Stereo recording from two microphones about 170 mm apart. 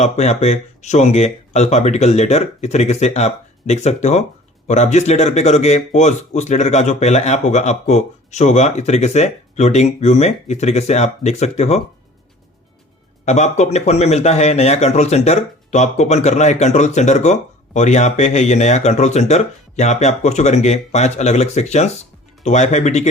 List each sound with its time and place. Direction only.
0.0 s speech: 40° left (ahead or behind)
13.2 s speech: 40° left (ahead or behind)